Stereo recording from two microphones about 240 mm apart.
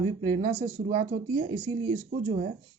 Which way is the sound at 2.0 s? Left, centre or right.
Right.